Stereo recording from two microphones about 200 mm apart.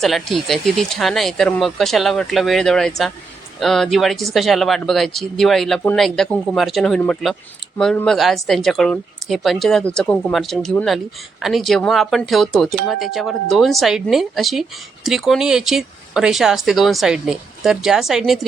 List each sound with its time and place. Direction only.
0.0 s speech: centre (ahead or behind)